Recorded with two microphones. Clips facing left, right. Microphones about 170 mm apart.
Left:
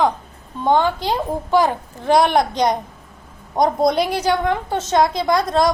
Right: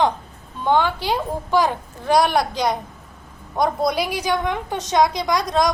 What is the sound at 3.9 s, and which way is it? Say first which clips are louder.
A woman's voice: left 4 dB; 10° right (ahead or behind).